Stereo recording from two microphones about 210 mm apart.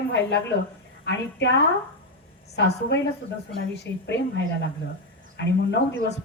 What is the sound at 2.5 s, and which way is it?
Speech, 55° left (ahead or behind).